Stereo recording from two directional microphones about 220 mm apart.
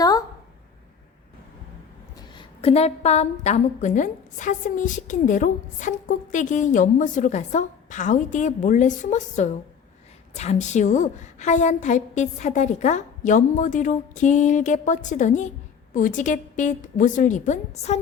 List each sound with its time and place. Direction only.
2.1 s a woman's voice: 20° left (ahead or behind)